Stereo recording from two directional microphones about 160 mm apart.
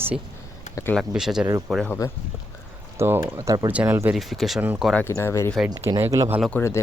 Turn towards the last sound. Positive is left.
turn(degrees=15)  # may be behind; listen again after turning